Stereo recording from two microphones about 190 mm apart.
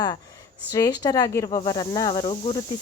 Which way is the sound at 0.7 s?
20° left (ahead or behind).